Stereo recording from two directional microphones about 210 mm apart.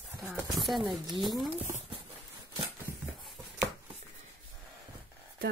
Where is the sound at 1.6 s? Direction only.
35° right (ahead or behind).